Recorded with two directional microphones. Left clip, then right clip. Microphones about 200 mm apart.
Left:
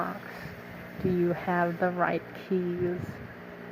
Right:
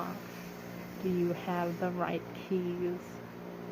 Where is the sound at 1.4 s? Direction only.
25° left (ahead or behind).